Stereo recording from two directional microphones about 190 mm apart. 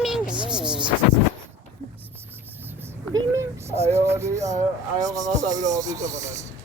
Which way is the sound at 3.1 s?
15° right (ahead or behind).